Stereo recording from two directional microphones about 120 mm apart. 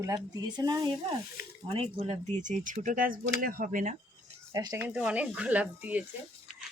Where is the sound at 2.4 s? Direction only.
90° right.